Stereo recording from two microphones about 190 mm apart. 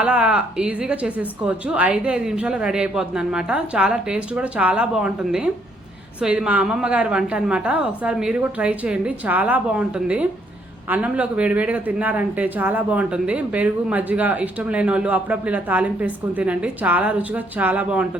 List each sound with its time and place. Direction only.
0.0 s a woman's voice: 5° right (ahead or behind)